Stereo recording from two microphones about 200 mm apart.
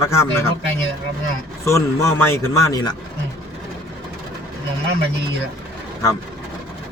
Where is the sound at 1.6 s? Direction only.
15° left (ahead or behind).